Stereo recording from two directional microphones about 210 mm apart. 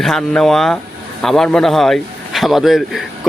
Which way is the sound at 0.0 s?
Centre (ahead or behind).